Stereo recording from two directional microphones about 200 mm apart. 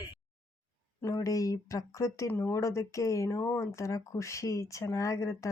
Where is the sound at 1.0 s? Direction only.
15° left (ahead or behind).